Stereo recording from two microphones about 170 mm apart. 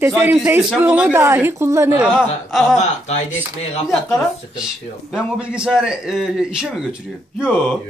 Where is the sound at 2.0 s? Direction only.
5° right (ahead or behind).